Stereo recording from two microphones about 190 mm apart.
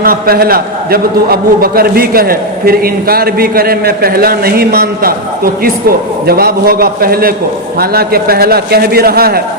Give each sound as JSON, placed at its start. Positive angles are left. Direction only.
{"t": 0.0, "sound": "a man's voice", "side_deg": -50}